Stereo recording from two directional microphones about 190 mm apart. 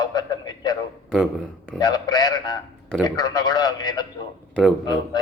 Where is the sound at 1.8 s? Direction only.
20° left (ahead or behind).